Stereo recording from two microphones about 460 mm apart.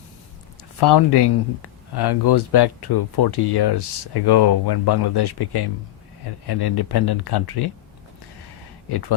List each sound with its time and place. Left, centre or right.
0.8 s speech: left
8.9 s speech: left